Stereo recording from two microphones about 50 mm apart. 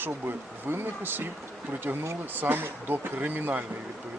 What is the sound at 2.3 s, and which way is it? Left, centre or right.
Speech, right.